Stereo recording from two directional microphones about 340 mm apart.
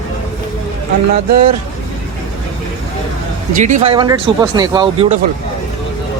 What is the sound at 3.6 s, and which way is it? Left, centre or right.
Speech, centre.